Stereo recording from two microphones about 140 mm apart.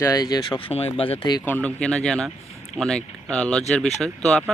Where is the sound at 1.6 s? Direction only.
5° left (ahead or behind).